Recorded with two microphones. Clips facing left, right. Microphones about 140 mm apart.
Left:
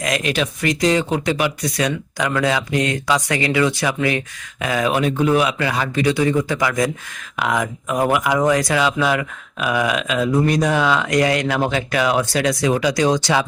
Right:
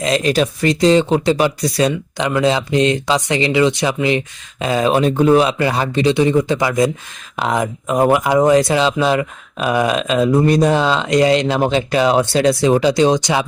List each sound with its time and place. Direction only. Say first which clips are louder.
0.0 s speech: right 5 dB; 30° right (ahead or behind)